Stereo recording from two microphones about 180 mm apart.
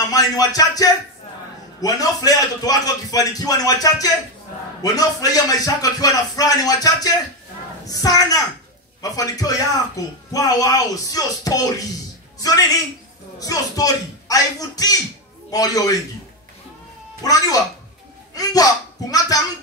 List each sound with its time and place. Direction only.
0.1 s a woman's voice: 20° left (ahead or behind)
17.2 s speech: 20° left (ahead or behind)